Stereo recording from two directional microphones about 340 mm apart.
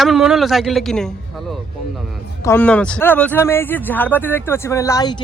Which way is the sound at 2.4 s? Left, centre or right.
Centre.